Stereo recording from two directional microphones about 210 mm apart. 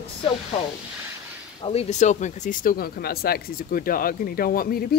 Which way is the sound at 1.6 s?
30° left (ahead or behind).